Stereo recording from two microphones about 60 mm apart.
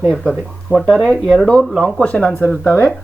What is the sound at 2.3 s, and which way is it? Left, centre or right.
Speech, left.